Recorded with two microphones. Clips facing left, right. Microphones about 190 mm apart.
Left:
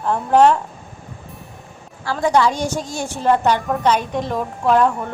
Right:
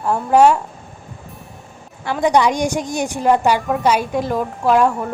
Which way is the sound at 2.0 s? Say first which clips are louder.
Right 1 dB; 20° right (ahead or behind).